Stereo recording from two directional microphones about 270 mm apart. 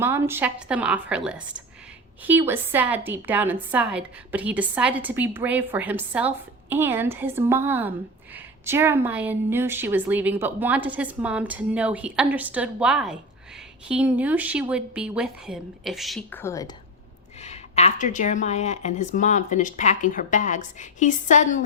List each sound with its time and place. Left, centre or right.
0.0 s a woman's voice: centre
17.4 s speech: left